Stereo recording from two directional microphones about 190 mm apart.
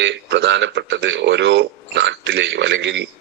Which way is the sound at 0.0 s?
70° right (ahead or behind).